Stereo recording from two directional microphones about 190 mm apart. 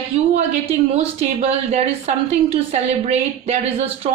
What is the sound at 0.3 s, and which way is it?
Speech, 35° right (ahead or behind).